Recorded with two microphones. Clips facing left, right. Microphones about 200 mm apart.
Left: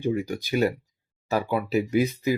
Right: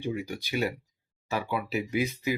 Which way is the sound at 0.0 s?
45° left (ahead or behind).